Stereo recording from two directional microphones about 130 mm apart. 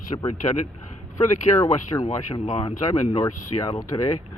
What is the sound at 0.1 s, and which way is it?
Speech, 40° left (ahead or behind).